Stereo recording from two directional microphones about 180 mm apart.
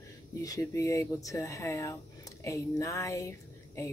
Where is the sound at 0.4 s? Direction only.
20° left (ahead or behind).